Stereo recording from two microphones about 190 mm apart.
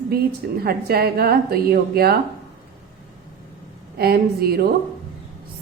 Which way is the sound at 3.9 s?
55° right (ahead or behind).